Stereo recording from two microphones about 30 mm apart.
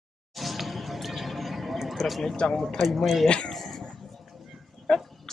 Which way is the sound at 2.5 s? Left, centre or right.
Centre.